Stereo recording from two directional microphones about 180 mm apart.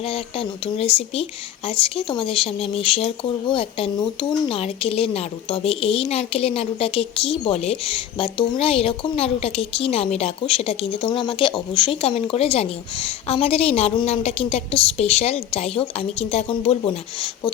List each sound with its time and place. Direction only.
0.0 s speech: 30° left (ahead or behind)